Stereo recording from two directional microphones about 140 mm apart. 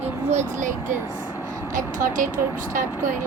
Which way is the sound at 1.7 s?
70° right (ahead or behind).